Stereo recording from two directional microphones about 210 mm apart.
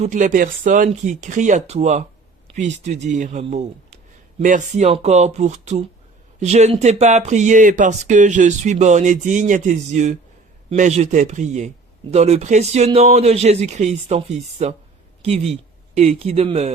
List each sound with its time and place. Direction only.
0.0 s speech: 35° right (ahead or behind)
2.5 s a sound: 25° right (ahead or behind)
2.8 s speech: 30° right (ahead or behind)